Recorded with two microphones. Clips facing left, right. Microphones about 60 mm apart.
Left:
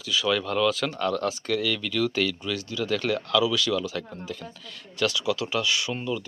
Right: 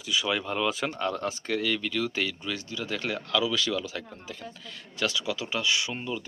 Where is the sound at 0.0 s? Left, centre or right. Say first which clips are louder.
Left 3 dB; centre.